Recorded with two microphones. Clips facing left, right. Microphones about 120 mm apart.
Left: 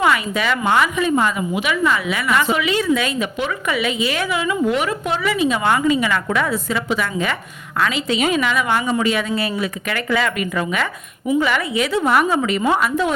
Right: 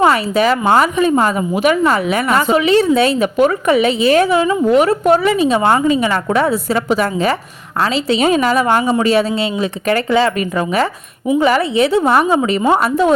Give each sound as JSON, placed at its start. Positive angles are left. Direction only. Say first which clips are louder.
{"t": 0.0, "sound": "a woman's voice", "louder": "right 6 dB", "side_deg": -35}
{"t": 11.4, "sound": "a woman's voice", "louder": "right 7 dB", "side_deg": -35}